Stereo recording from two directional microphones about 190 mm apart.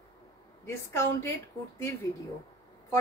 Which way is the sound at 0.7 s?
15° left (ahead or behind).